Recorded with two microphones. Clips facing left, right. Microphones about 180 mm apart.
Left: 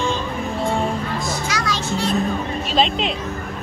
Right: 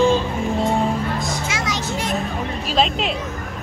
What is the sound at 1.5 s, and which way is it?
Children playing, 20° right (ahead or behind).